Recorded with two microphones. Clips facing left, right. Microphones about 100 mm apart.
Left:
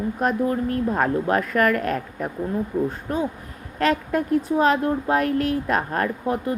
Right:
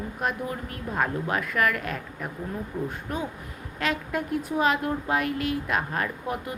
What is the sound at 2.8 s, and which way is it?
Speech, 35° left (ahead or behind).